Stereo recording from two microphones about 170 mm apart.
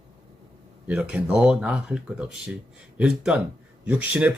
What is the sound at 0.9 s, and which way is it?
Speech, 5° right (ahead or behind).